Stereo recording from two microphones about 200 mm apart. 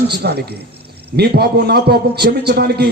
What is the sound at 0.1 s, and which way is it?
A man's voice, 55° right (ahead or behind).